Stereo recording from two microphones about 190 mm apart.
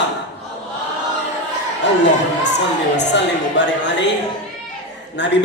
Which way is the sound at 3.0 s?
65° left (ahead or behind).